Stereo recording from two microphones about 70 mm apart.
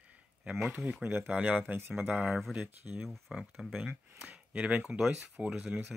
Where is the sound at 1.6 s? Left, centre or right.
Right.